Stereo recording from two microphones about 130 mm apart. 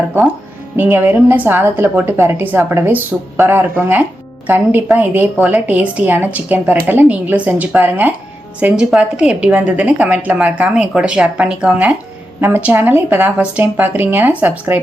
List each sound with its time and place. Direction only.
0.8 s a woman's voice: 15° right (ahead or behind)